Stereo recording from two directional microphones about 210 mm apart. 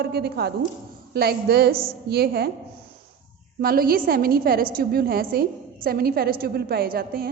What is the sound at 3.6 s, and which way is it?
A woman's voice, 45° right (ahead or behind).